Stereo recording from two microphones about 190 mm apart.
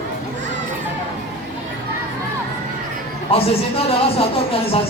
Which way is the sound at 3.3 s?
30° left (ahead or behind).